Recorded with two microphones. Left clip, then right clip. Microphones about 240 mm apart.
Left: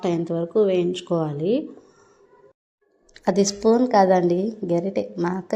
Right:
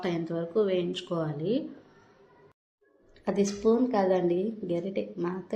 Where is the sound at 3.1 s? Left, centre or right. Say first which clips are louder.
Left 8 dB; left.